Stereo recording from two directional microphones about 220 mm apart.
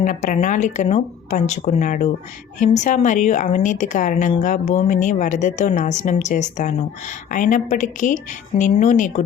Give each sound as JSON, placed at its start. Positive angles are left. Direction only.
{"t": 0.0, "sound": "a woman's voice", "side_deg": 35}